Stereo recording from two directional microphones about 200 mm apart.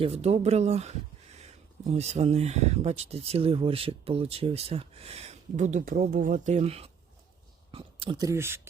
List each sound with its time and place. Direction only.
0.0 s speech: 30° right (ahead or behind)
8.3 s speech: 10° right (ahead or behind)